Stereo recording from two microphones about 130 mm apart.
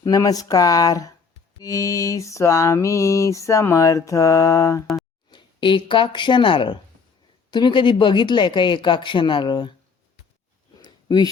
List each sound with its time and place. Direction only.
0.0 s mantra: 30° left (ahead or behind)
5.3 s speech: 40° left (ahead or behind)
10.8 s a sound: 30° left (ahead or behind)